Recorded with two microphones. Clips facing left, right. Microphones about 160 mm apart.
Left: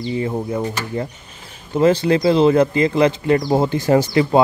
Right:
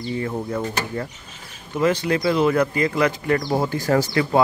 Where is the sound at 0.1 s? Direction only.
20° left (ahead or behind).